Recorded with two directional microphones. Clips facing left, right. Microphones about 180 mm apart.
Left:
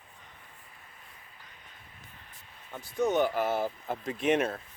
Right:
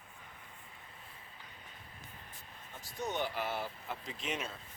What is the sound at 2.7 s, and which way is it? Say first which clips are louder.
Speech: left 11 dB; 55° left (ahead or behind).